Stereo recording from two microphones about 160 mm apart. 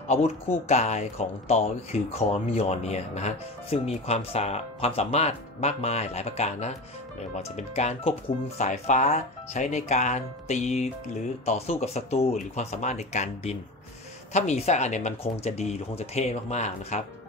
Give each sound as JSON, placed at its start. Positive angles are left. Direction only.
{"t": 0.7, "sound": "speech", "side_deg": 45}